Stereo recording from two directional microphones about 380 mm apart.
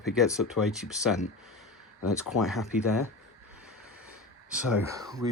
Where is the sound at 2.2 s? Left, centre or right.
Centre.